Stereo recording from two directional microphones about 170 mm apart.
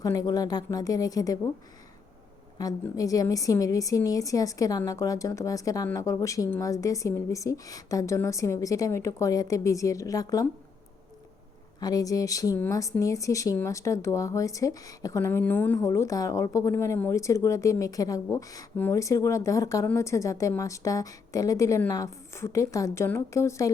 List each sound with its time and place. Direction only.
0.0 s speech: 20° left (ahead or behind)
2.9 s speech: 20° left (ahead or behind)
11.8 s speech: 20° left (ahead or behind)